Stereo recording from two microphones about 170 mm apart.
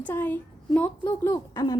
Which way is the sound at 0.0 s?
10° left (ahead or behind).